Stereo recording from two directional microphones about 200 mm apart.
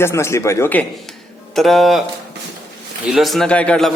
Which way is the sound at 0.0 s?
15° left (ahead or behind).